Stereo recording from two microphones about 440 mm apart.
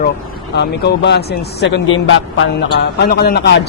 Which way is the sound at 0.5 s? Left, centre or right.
Left.